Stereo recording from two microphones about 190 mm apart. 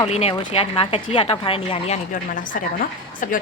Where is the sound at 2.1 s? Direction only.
45° left (ahead or behind).